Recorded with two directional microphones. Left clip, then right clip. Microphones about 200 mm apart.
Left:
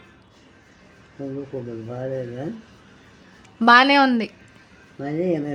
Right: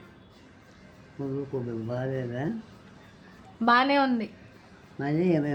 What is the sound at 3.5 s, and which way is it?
Speech, 25° left (ahead or behind).